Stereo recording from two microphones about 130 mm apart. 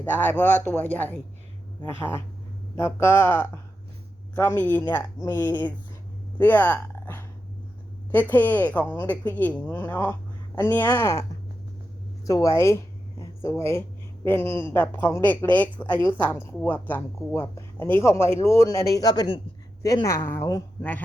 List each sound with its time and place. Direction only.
0.0 s speech: 15° left (ahead or behind)